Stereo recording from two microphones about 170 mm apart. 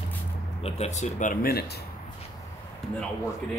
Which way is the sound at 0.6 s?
40° left (ahead or behind).